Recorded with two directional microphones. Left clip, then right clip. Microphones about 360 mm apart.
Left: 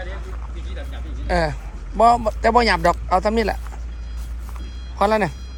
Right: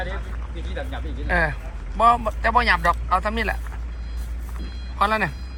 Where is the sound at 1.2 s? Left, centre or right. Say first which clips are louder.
Left 1 dB; centre.